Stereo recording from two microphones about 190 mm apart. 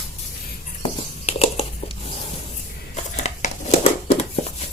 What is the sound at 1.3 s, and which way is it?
Crumpling, 30° left (ahead or behind).